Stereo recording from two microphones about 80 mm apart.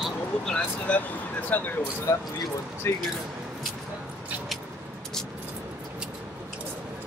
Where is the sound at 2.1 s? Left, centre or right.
Left.